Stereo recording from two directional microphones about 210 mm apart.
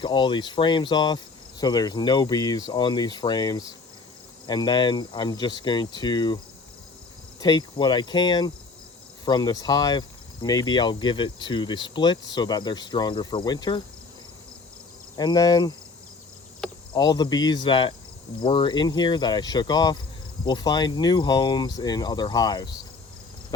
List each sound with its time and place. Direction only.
0.0 s speech: 20° left (ahead or behind)
15.1 s speech: 20° left (ahead or behind)
16.9 s speech: 20° left (ahead or behind)